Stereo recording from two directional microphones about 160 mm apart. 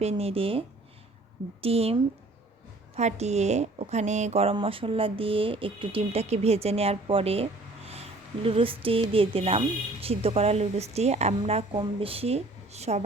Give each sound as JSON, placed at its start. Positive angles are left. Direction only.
{"t": 0.0, "sound": "speech", "side_deg": -40}
{"t": 1.6, "sound": "speech", "side_deg": -40}